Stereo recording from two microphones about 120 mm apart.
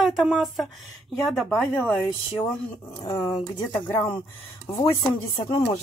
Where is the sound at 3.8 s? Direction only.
10° left (ahead or behind).